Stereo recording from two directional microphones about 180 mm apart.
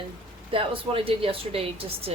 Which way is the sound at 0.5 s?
30° right (ahead or behind).